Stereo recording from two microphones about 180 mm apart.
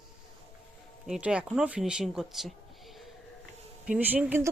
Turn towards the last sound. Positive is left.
turn(degrees=-10)  # may be behind; listen again after turning